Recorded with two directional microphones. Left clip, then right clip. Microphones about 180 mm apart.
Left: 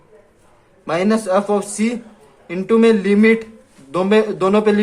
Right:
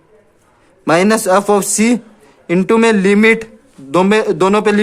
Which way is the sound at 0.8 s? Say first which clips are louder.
Right 7 dB; 70° right (ahead or behind).